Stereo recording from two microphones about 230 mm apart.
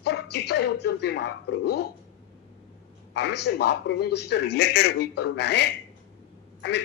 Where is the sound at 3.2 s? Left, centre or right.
Left.